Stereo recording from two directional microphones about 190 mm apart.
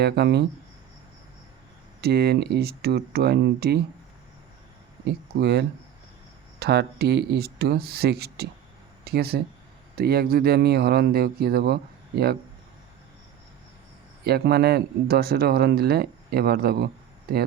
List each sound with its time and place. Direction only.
0.0 s speech: 60° right (ahead or behind)
2.0 s speech: 55° right (ahead or behind)
5.0 s speech: 60° right (ahead or behind)
14.3 s speech: 55° right (ahead or behind)